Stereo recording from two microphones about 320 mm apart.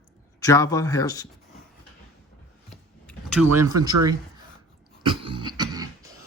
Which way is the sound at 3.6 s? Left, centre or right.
Right.